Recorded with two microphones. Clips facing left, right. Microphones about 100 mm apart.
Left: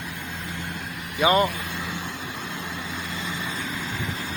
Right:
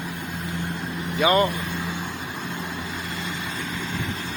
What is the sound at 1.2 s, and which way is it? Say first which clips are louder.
Speech: even; 20° left (ahead or behind).